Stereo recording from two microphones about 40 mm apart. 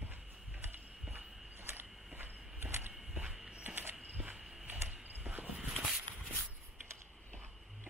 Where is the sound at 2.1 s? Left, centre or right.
Right.